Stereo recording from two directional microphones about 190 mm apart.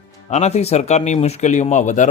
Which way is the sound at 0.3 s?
35° left (ahead or behind).